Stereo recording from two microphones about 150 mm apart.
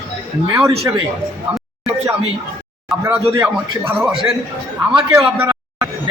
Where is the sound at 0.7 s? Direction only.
40° right (ahead or behind).